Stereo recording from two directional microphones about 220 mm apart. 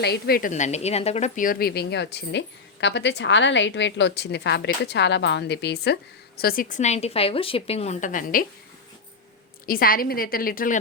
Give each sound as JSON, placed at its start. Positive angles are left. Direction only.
{"t": 0.0, "sound": "a woman's voice", "side_deg": 45}
{"t": 9.6, "sound": "a woman's voice", "side_deg": 40}